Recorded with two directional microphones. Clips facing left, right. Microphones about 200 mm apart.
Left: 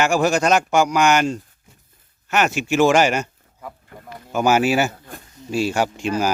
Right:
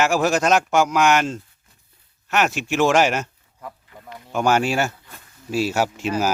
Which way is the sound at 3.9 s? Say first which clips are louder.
Left 3 dB; 50° left (ahead or behind).